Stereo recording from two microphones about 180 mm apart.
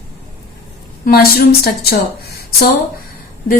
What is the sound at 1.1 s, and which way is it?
Speech, 60° left (ahead or behind).